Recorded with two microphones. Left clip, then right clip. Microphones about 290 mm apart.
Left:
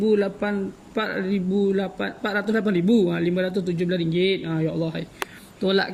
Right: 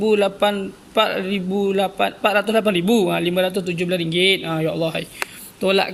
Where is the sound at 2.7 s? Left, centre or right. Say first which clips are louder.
Right 3 dB; right.